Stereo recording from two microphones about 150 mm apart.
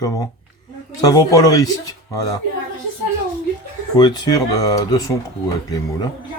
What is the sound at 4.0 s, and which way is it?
Music, 30° left (ahead or behind).